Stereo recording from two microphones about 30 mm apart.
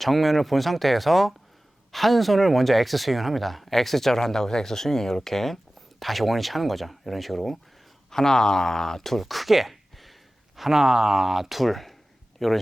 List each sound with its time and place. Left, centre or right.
0.0 s speech: centre
8.1 s speech: centre
9.2 s speech: centre